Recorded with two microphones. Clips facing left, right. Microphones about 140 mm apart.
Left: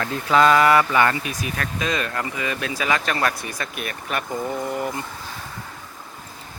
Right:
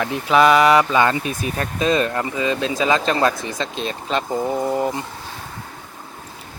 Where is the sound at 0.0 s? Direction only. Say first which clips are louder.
Right 2 dB; 15° right (ahead or behind).